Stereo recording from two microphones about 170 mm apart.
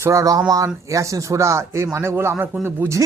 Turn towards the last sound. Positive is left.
turn(degrees=-15)  # may be behind; listen again after turning